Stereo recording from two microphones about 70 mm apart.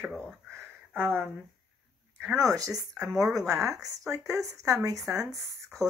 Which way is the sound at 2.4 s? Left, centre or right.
Right.